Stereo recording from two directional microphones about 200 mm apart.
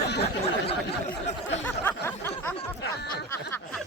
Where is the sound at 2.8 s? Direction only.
55° left (ahead or behind).